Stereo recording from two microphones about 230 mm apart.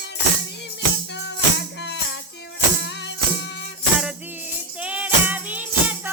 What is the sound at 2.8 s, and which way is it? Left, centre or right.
Music, left.